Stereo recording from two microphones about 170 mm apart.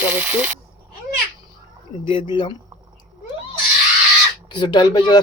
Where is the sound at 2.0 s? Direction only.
30° left (ahead or behind).